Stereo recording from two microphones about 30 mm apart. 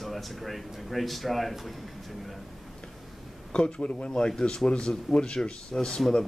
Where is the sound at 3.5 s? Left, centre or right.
Left.